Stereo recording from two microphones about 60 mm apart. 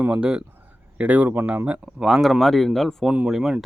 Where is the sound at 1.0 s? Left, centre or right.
Right.